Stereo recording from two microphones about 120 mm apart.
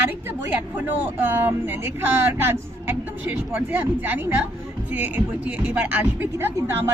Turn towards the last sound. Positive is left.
turn(degrees=-20)  # may be behind; listen again after turning